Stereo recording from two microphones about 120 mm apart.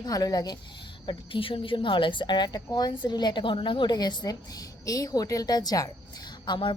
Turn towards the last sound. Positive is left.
turn(degrees=40)  # may be behind; listen again after turning